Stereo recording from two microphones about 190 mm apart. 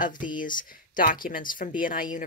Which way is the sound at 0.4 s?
45° left (ahead or behind).